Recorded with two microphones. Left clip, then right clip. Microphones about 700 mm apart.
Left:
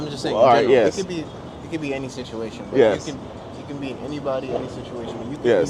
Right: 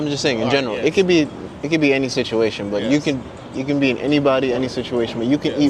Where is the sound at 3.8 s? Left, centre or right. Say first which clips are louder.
Right 13 dB; right.